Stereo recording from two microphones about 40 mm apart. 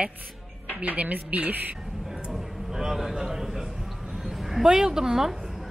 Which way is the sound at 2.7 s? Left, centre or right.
Centre.